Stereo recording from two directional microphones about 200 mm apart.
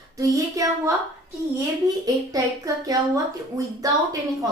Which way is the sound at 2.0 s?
15° right (ahead or behind).